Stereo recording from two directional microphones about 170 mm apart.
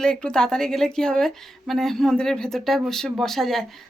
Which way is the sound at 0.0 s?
5° left (ahead or behind).